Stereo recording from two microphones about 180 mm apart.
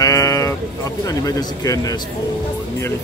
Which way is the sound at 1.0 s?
20° left (ahead or behind).